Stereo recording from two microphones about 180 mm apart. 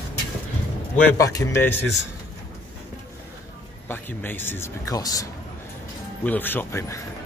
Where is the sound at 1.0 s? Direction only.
20° left (ahead or behind).